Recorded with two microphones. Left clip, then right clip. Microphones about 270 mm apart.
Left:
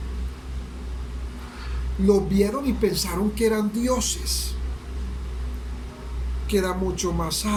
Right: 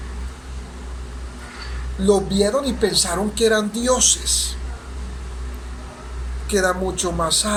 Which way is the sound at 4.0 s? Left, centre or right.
Left.